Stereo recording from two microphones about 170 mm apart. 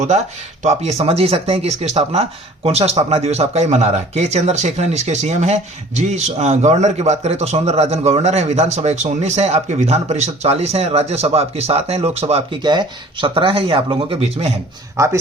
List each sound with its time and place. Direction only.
0.6 s speech: 40° right (ahead or behind)
14.9 s speech: 15° right (ahead or behind)